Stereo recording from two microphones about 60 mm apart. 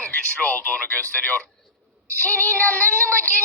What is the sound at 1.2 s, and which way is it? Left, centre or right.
Child singing, left.